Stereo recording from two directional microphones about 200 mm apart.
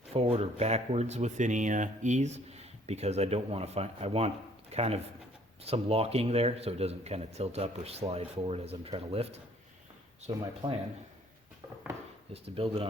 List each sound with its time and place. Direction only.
0.1 s a man's voice: 30° right (ahead or behind)
12.3 s speech: 30° right (ahead or behind)